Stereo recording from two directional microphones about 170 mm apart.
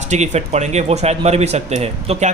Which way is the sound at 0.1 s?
40° right (ahead or behind).